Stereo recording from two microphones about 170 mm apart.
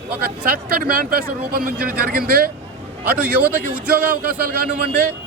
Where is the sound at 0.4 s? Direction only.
55° right (ahead or behind).